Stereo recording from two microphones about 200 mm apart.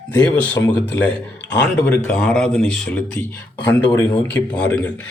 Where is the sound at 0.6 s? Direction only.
15° left (ahead or behind).